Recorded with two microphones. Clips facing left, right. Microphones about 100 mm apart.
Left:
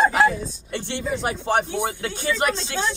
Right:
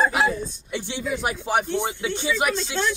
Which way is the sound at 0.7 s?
10° right (ahead or behind).